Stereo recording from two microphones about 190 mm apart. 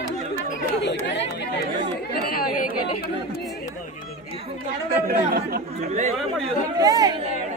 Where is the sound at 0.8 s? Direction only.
70° left (ahead or behind).